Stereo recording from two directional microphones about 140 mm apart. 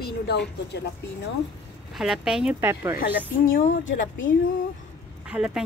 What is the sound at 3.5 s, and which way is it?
Speech, 65° left (ahead or behind).